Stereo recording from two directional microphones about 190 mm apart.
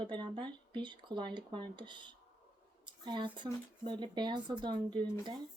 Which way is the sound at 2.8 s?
25° right (ahead or behind).